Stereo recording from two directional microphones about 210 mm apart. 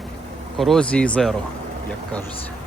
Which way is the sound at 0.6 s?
5° left (ahead or behind).